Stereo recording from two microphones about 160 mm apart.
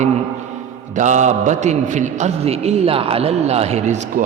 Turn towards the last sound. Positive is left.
turn(degrees=-40)  # may be behind; listen again after turning